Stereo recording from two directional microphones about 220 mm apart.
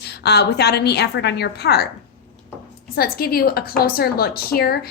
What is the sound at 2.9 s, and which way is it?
A woman's voice, 45° left (ahead or behind).